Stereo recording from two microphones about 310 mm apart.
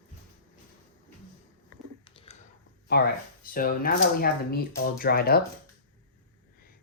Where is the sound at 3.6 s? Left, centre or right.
Left.